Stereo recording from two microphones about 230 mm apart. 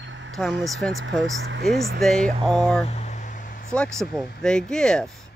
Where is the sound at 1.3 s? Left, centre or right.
Right.